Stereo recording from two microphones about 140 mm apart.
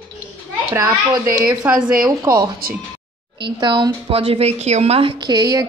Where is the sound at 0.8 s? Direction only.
20° right (ahead or behind).